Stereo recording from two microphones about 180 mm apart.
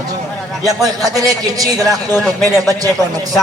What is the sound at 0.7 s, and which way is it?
Speech, 20° right (ahead or behind).